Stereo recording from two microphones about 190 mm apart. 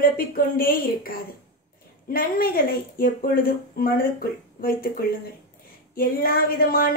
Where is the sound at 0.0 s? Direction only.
50° left (ahead or behind).